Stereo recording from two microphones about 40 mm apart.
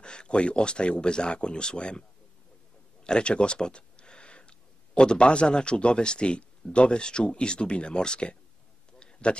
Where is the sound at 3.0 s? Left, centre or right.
Left.